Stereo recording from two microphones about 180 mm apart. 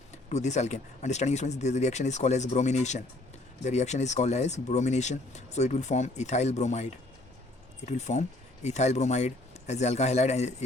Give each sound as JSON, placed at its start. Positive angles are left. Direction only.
{"t": 0.3, "sound": "speech", "side_deg": 40}
{"t": 7.9, "sound": "speech", "side_deg": 40}